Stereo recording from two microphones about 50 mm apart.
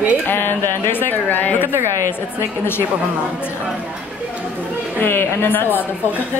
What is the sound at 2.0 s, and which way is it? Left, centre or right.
Speech, left.